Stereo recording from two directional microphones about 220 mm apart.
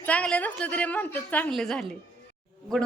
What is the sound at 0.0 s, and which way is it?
A woman's voice, 5° left (ahead or behind).